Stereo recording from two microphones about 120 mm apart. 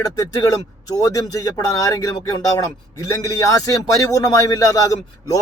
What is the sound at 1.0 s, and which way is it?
A man's voice, 30° left (ahead or behind).